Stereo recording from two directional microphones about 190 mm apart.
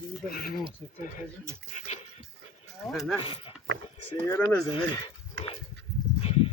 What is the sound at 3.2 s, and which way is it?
Speech, 30° left (ahead or behind).